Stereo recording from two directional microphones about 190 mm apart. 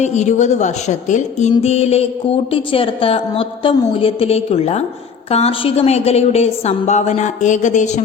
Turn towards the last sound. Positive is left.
turn(degrees=40)  # may be behind; listen again after turning